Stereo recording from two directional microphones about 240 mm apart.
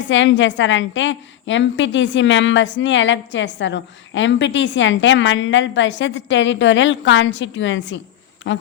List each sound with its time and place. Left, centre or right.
0.1 s a woman's voice: left